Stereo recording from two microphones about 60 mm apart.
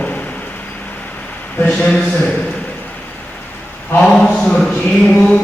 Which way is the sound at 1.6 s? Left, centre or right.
Centre.